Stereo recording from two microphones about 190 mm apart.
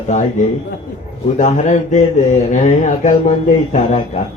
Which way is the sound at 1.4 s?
40° left (ahead or behind).